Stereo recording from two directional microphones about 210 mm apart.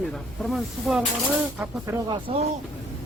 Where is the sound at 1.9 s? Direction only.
10° right (ahead or behind).